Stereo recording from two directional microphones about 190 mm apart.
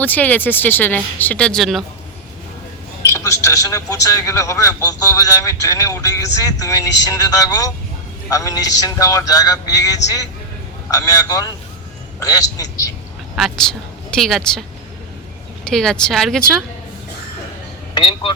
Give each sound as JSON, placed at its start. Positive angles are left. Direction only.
{"t": 0.0, "sound": "a man's voice", "side_deg": 10}
{"t": 3.1, "sound": "a man's voice", "side_deg": 15}
{"t": 11.3, "sound": "a man's voice", "side_deg": 15}
{"t": 13.3, "sound": "a woman's voice", "side_deg": 0}
{"t": 15.6, "sound": "speech", "side_deg": 5}
{"t": 17.9, "sound": "speech", "side_deg": 25}